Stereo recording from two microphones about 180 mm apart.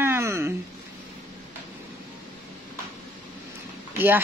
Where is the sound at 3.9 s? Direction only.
10° right (ahead or behind).